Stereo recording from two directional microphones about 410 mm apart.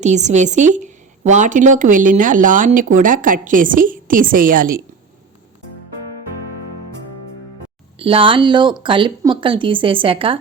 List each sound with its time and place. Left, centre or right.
0.0 s a woman's voice: centre
7.9 s speech: centre